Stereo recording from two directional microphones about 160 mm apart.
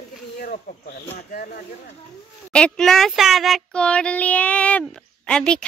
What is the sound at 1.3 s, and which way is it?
Speech, 60° left (ahead or behind).